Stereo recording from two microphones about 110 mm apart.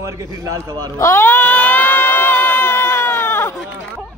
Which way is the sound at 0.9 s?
25° left (ahead or behind).